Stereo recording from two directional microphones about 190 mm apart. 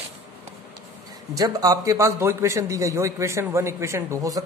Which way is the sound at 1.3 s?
20° right (ahead or behind).